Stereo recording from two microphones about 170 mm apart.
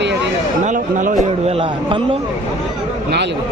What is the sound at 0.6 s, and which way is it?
A man's voice, 50° right (ahead or behind).